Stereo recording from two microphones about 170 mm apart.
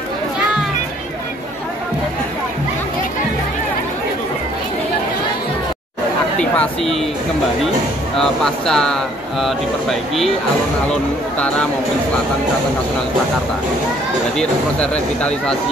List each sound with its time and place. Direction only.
6.5 s speech: 5° left (ahead or behind)
8.2 s speech: 5° left (ahead or behind)
11.3 s speech: 5° left (ahead or behind)
14.3 s speech: 5° left (ahead or behind)